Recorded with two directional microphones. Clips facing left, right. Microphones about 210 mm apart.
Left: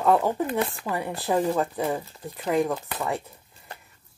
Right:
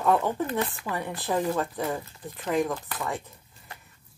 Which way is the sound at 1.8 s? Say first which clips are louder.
Left 3 dB; 30° left (ahead or behind).